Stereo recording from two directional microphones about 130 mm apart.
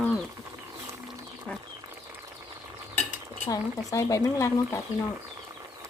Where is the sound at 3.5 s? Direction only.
25° left (ahead or behind).